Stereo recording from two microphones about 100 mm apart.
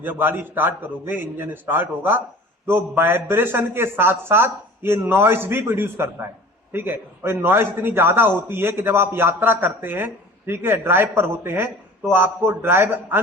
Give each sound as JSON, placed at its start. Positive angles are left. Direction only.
{"t": 0.0, "sound": "a man's voice", "side_deg": -20}